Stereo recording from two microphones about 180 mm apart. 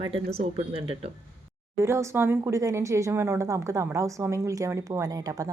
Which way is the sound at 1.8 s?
15° right (ahead or behind).